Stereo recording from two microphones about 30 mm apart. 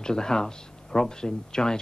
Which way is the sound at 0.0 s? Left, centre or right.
Left.